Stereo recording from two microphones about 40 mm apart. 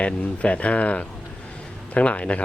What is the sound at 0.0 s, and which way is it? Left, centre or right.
Speech, left.